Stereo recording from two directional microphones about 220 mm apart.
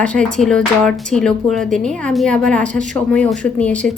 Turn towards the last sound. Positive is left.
turn(degrees=5)  # may be behind; listen again after turning